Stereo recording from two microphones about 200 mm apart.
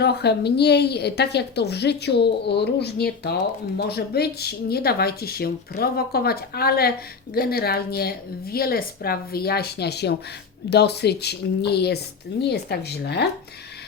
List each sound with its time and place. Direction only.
0.0 s a woman's voice: 55° left (ahead or behind)